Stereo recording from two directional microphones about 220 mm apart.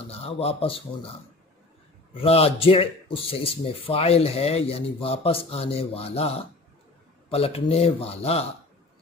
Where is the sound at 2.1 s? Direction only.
25° left (ahead or behind).